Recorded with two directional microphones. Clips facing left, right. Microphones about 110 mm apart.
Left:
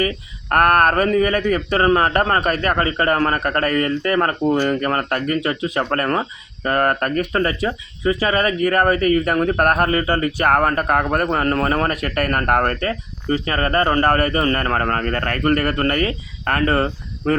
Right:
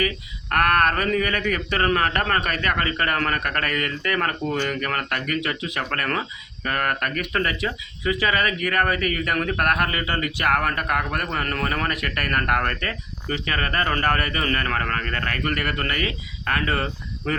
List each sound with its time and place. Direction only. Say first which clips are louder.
0.5 s speech: left 5 dB; 40° left (ahead or behind)